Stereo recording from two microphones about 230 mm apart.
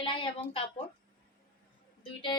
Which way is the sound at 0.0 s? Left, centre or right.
Left.